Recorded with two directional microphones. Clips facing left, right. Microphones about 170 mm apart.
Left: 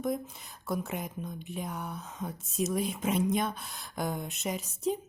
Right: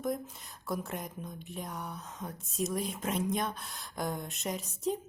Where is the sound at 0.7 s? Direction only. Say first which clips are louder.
Left 3 dB; centre (ahead or behind).